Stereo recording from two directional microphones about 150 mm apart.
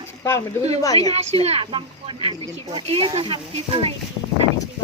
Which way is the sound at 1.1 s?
45° right (ahead or behind).